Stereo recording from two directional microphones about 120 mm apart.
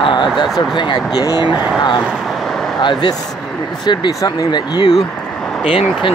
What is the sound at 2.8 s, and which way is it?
Speech, 40° left (ahead or behind).